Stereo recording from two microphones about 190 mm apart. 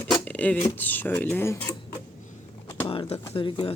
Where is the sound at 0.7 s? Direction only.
10° left (ahead or behind).